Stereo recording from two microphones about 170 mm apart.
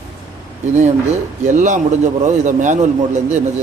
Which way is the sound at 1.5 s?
45° right (ahead or behind).